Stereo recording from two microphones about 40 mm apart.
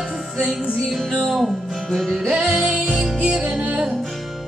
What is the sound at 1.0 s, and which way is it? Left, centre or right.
Music, centre.